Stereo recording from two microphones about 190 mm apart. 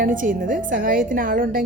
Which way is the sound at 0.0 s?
45° right (ahead or behind).